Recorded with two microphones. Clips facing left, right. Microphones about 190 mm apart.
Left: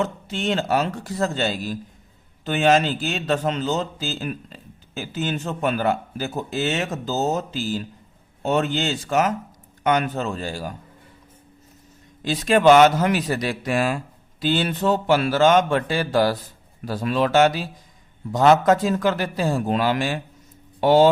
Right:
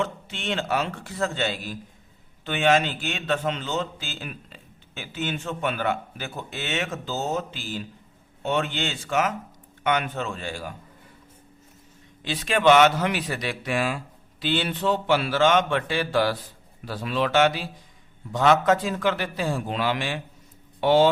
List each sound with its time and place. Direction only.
0.0 s a man's voice: 40° left (ahead or behind)
12.2 s a man's voice: 40° left (ahead or behind)